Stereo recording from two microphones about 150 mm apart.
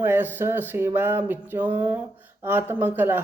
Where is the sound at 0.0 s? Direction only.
15° right (ahead or behind).